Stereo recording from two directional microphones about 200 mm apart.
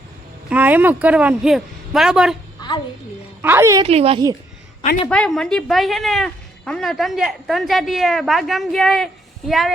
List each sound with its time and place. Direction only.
0.5 s speech: 10° right (ahead or behind)
2.6 s a sound: 20° left (ahead or behind)
3.4 s a woman's voice: 10° right (ahead or behind)
3.8 s a woman's voice: 30° right (ahead or behind)
5.0 s speech: 5° left (ahead or behind)